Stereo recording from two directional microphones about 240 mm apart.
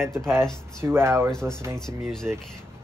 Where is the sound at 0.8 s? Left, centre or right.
Centre.